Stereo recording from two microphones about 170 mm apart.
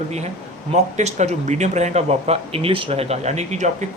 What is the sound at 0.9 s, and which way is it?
Speech, 40° right (ahead or behind).